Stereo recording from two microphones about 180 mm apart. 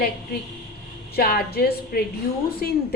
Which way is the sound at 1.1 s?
60° left (ahead or behind).